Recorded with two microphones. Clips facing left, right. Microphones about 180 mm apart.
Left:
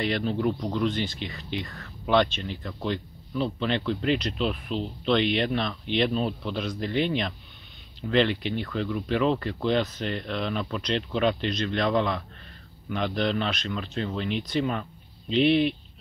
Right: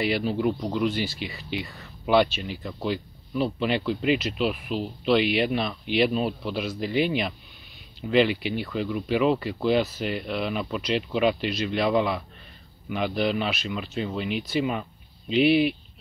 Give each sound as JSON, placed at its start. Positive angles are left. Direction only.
{"t": 0.0, "sound": "speech", "side_deg": -5}